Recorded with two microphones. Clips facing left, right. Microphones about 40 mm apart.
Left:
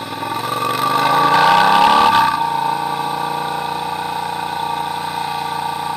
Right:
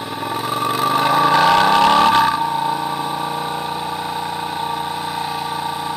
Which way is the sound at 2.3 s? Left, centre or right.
Left.